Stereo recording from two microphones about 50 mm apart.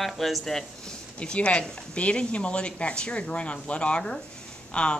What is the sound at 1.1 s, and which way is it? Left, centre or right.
Speech, left.